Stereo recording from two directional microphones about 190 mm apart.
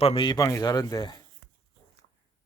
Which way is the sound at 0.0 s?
30° left (ahead or behind).